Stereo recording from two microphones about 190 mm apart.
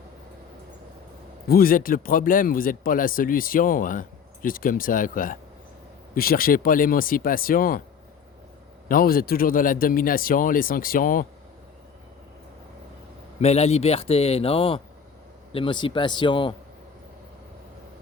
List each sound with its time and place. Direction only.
1.5 s speech: 50° left (ahead or behind)
8.9 s speech: 50° left (ahead or behind)
13.4 s a man's voice: 35° left (ahead or behind)